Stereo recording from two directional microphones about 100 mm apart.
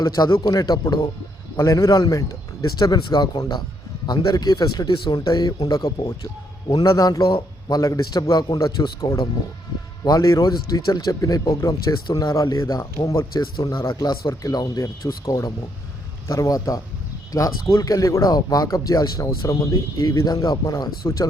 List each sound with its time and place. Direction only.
0.0 s a man's voice: 45° left (ahead or behind)
7.3 s a man's voice: 60° left (ahead or behind)
7.8 s a man's voice: 35° left (ahead or behind)